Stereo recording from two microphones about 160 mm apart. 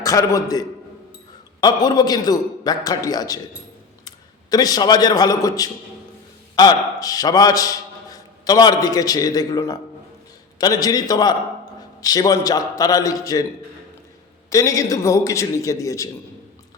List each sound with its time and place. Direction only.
0.0 s a man's voice: 20° left (ahead or behind)
1.6 s a man's voice: 25° left (ahead or behind)
14.5 s a man's voice: 20° left (ahead or behind)